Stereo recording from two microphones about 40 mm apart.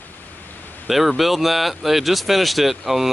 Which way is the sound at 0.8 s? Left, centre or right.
Centre.